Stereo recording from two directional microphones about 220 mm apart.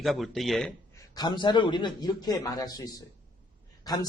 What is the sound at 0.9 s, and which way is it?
A man's voice, 20° left (ahead or behind).